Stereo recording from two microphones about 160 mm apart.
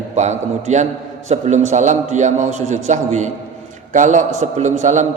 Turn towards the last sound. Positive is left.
turn(degrees=-50)  # may be behind; listen again after turning